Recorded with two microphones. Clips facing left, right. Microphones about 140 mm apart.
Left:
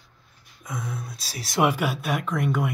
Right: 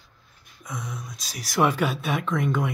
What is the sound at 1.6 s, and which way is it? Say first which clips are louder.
Speech: even; 10° left (ahead or behind).